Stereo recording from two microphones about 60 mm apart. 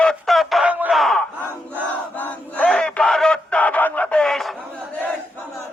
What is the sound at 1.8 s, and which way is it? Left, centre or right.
Battle cry, left.